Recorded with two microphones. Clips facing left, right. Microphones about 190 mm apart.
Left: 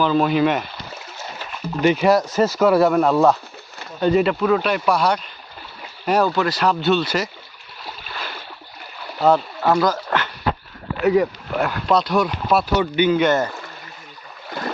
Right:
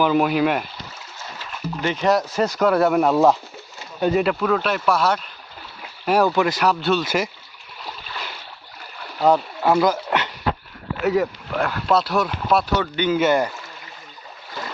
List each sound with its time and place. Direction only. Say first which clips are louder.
0.0 s speech: left 1 dB; 10° right (ahead or behind)
1.8 s speech: left 4 dB; 10° left (ahead or behind)
2.9 s speech: even; 10° right (ahead or behind)
9.2 s speech: left 1 dB; 10° right (ahead or behind)
11.0 s speech: left 3 dB; centre (ahead or behind)